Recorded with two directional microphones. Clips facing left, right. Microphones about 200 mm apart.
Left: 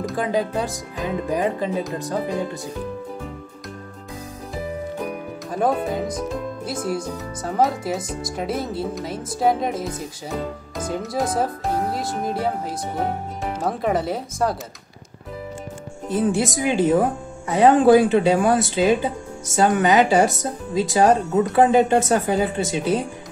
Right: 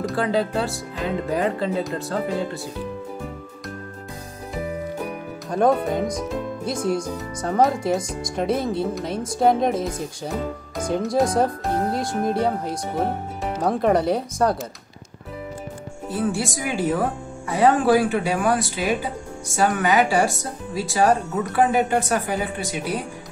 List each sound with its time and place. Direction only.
0.1 s speech: 15° left (ahead or behind)
5.5 s speech: 5° left (ahead or behind)
16.1 s speech: 20° left (ahead or behind)